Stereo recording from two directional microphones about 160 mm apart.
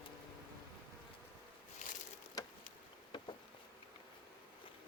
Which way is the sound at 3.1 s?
30° left (ahead or behind).